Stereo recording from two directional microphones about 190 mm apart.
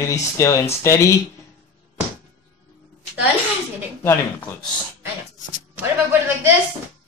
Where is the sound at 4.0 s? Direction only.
10° left (ahead or behind).